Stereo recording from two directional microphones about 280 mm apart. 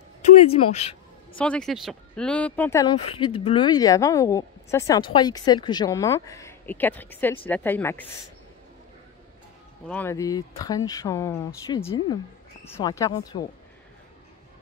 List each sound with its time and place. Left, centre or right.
0.2 s a sound: left
1.4 s speech: centre
9.8 s speech: centre